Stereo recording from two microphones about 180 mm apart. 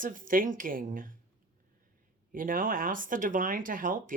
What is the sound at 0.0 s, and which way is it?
Speech, 50° right (ahead or behind).